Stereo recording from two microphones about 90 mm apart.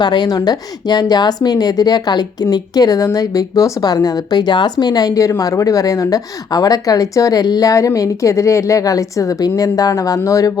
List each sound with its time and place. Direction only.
0.0 s a woman's voice: 55° left (ahead or behind)